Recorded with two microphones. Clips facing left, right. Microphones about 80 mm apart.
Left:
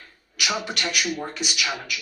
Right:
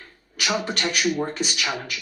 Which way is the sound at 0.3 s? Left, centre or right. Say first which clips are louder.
Right 2 dB; right.